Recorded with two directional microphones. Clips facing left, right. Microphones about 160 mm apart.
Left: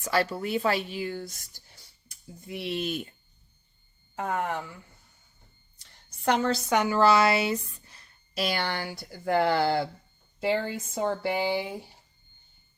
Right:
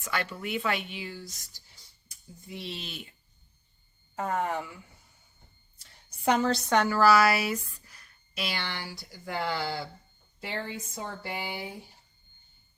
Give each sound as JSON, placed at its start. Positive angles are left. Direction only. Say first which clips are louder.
{"t": 0.0, "sound": "speech", "louder": "left 6 dB", "side_deg": 35}
{"t": 4.1, "sound": "speech", "louder": "even", "side_deg": 0}
{"t": 5.8, "sound": "a sound", "louder": "even", "side_deg": -5}
{"t": 6.7, "sound": "speech", "louder": "even", "side_deg": 20}
{"t": 8.4, "sound": "speech", "louder": "left 6 dB", "side_deg": 50}
{"t": 10.4, "sound": "a woman's voice", "louder": "left 9 dB", "side_deg": 90}